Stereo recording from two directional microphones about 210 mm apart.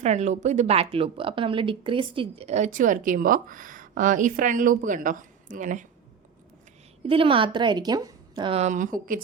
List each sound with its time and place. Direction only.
0.0 s speech: 35° right (ahead or behind)
7.1 s a woman's voice: 25° right (ahead or behind); by 9.2 s 40° right (ahead or behind)